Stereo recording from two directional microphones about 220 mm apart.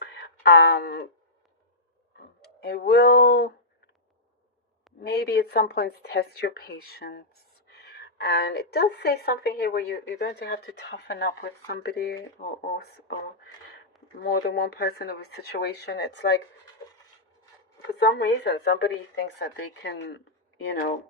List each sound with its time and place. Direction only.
0.0 s a sound: 50° left (ahead or behind)
2.6 s a woman's voice: 45° left (ahead or behind)
4.9 s a woman's voice: 45° left (ahead or behind)
12.4 s speech: 35° left (ahead or behind)
12.7 s a woman's voice: 50° left (ahead or behind)
14.3 s a woman's voice: 50° left (ahead or behind)
18.0 s a woman's voice: 50° left (ahead or behind)